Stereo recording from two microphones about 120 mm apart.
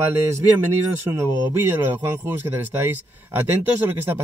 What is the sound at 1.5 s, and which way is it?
Speech, 20° right (ahead or behind).